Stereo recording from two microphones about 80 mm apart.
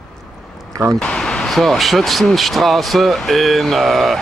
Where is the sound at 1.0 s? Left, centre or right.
Centre.